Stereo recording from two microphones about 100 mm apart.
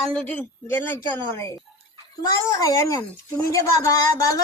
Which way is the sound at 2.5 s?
35° left (ahead or behind).